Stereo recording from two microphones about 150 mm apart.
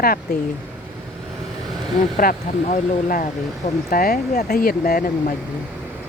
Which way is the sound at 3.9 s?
80° left.